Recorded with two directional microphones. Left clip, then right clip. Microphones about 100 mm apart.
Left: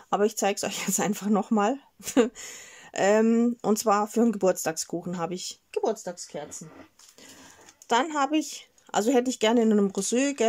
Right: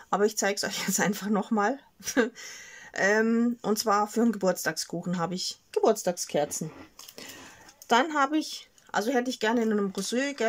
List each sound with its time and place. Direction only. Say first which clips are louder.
0.1 s speech: left 1 dB; 25° left (ahead or behind)
5.8 s speech: right 4 dB; 10° right (ahead or behind)
7.9 s speech: right 1 dB; centre (ahead or behind)
8.2 s speech: even; 20° left (ahead or behind)
8.9 s speech: left 3 dB; 35° left (ahead or behind)